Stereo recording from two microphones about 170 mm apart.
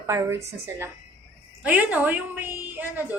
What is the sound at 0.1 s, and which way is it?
A woman's voice, 15° right (ahead or behind).